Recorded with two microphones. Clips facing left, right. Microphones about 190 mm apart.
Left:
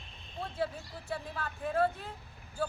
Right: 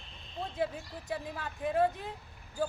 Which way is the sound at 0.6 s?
15° right (ahead or behind).